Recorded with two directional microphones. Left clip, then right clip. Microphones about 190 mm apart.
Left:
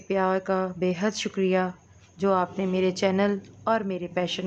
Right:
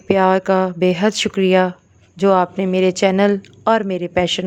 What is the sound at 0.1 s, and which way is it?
A woman's voice, 45° right (ahead or behind).